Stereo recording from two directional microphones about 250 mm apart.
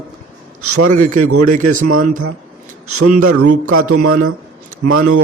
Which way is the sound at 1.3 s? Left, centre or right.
Right.